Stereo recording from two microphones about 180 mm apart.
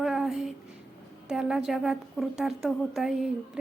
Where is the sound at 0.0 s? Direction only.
Centre (ahead or behind).